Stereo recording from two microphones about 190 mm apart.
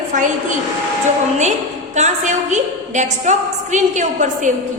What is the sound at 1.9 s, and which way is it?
A woman's voice, 40° right (ahead or behind).